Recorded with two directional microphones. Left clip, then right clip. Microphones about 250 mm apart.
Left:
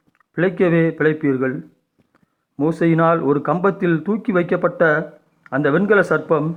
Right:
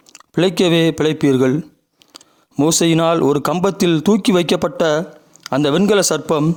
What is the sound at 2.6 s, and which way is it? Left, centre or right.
Speech, right.